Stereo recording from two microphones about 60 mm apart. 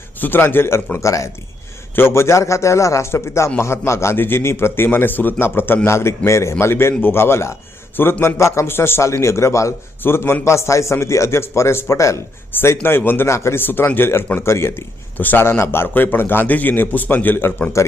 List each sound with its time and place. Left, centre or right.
0.2 s a man's voice: left
0.9 s speech: left
2.0 s a man's voice: left
5.9 s a man's voice: left
10.0 s a man's voice: left
10.4 s a man's voice: left
12.5 s a man's voice: left
13.2 s a man's voice: left
13.6 s a man's voice: left
15.2 s a man's voice: left
15.4 s a man's voice: left